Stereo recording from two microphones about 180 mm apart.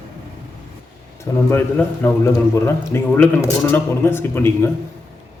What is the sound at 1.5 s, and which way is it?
A man's voice, 10° left (ahead or behind).